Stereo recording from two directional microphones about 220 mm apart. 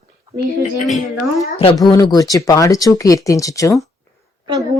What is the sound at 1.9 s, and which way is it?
Speech, 15° left (ahead or behind).